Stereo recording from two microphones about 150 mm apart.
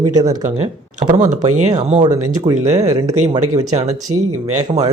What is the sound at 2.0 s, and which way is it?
Speech, 30° right (ahead or behind).